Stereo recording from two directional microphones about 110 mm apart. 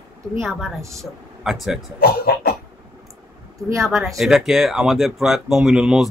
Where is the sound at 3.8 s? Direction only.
Centre (ahead or behind).